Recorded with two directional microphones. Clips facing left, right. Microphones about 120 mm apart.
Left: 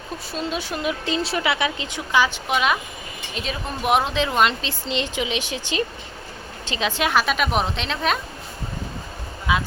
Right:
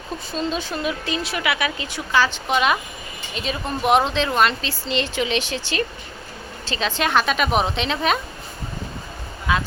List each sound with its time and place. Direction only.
0.3 s a woman's voice: 10° left (ahead or behind)
2.5 s a woman's voice: centre (ahead or behind)
9.5 s a sound: 10° left (ahead or behind)